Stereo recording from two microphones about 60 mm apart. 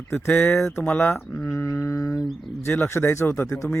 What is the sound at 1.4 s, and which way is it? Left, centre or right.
Speech, left.